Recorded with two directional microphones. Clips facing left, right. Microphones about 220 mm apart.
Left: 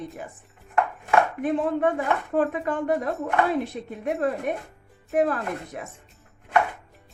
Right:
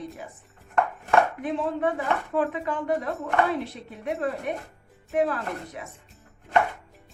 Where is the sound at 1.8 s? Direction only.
50° left (ahead or behind).